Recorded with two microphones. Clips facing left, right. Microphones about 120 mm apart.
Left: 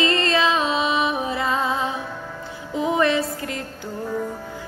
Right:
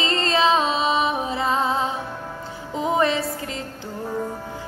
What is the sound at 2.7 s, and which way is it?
Music, 30° right (ahead or behind).